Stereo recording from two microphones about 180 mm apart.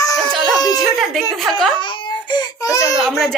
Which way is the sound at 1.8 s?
25° left (ahead or behind).